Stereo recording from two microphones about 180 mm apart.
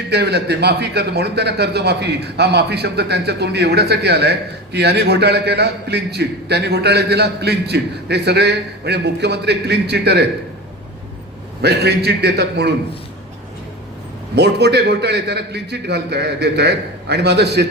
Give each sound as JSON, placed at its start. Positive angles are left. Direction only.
{"t": 0.1, "sound": "speech", "side_deg": -65}
{"t": 11.6, "sound": "speech", "side_deg": -65}
{"t": 14.3, "sound": "a man's voice", "side_deg": -65}